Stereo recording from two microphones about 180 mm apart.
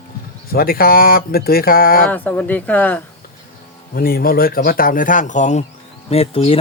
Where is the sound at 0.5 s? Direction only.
55° left (ahead or behind).